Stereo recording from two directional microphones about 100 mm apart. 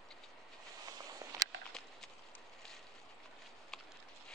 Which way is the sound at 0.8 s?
35° right (ahead or behind).